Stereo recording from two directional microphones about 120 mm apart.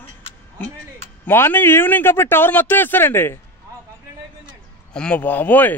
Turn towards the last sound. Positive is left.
turn(degrees=15)  # may be behind; listen again after turning